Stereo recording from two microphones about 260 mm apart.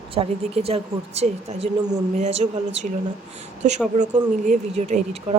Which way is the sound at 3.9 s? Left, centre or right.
Right.